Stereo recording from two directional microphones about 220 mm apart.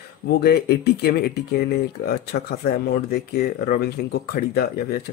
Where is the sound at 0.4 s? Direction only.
50° left (ahead or behind).